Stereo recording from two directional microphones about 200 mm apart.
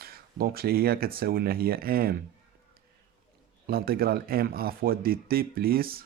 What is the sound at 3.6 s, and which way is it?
Speech, 50° right (ahead or behind).